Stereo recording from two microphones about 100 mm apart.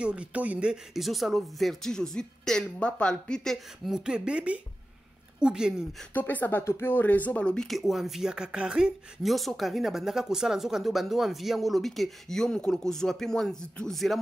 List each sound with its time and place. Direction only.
0.0 s speech: 10° right (ahead or behind)
6.1 s speech: 20° left (ahead or behind); by 14.2 s centre (ahead or behind)